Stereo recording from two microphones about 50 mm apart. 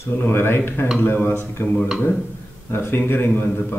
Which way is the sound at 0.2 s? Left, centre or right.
Left.